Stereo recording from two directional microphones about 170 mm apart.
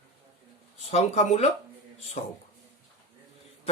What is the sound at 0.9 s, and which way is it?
Speech, 40° left (ahead or behind).